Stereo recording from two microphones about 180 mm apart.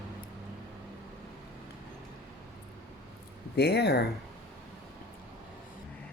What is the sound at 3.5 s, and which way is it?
Speech, 65° left (ahead or behind).